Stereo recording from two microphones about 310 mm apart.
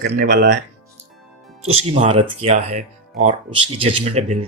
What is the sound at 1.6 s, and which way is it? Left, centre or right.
Speech, centre.